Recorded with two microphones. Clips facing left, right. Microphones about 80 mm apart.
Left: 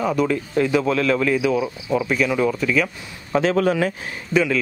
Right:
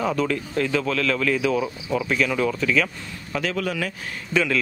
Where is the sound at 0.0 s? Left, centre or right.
Centre.